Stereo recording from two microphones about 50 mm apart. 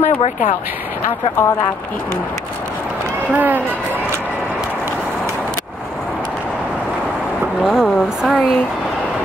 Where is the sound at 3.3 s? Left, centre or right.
Right.